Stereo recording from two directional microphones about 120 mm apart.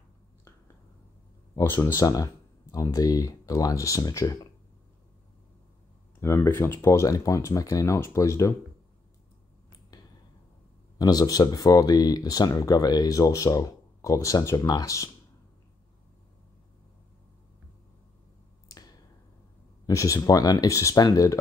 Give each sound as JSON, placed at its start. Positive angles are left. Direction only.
{"t": 1.5, "sound": "speech", "side_deg": 25}
{"t": 6.2, "sound": "speech", "side_deg": 25}
{"t": 11.0, "sound": "speech", "side_deg": 30}
{"t": 19.9, "sound": "speech", "side_deg": 25}